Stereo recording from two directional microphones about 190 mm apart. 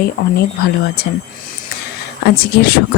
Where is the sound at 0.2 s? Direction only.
50° left (ahead or behind).